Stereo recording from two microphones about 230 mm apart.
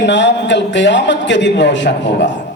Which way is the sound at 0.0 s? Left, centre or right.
Left.